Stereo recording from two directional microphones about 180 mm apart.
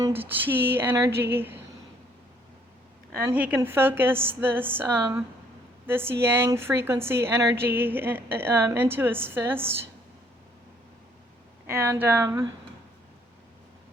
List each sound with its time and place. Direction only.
0.3 s speech: 10° right (ahead or behind)
3.2 s speech: 10° right (ahead or behind)
11.6 s speech: 15° right (ahead or behind)